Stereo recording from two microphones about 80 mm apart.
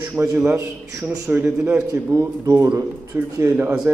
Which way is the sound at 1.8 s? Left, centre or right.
Right.